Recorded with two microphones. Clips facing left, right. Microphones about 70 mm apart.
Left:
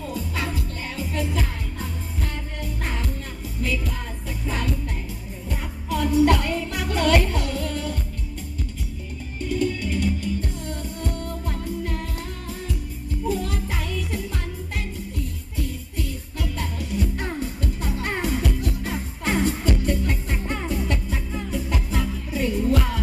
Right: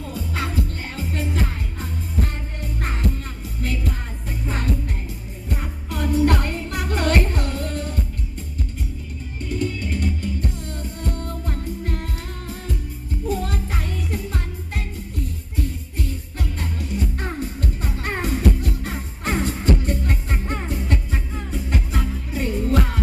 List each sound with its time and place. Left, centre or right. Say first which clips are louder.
0.1 s music: right 2 dB; right
9.5 s music: left 1 dB; right
13.2 s music: even; right